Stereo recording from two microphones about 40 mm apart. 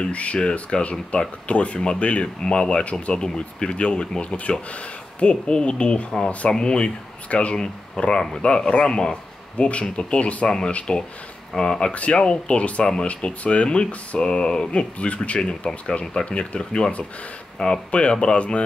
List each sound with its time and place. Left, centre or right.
0.0 s speech: left
0.4 s speech: left
1.1 s speech: left
7.5 s speech: centre
11.9 s speech: left